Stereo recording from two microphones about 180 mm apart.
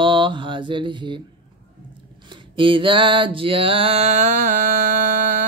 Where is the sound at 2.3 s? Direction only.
30° right (ahead or behind); by 5.5 s 45° right (ahead or behind).